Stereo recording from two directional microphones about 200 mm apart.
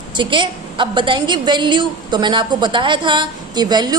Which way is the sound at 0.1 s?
25° right (ahead or behind).